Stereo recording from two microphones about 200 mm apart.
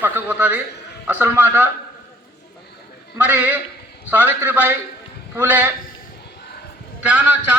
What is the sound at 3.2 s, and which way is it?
A man's voice, 10° right (ahead or behind).